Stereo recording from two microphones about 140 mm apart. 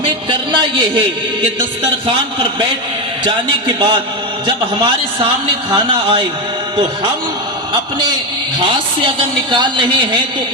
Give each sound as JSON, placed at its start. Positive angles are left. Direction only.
{"t": 0.3, "sound": "a woman's voice", "side_deg": -35}
{"t": 2.0, "sound": "a woman's voice", "side_deg": -35}
{"t": 7.7, "sound": "a woman's voice", "side_deg": -35}